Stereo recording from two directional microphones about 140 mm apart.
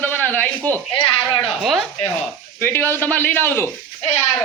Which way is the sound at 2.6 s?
15° left (ahead or behind).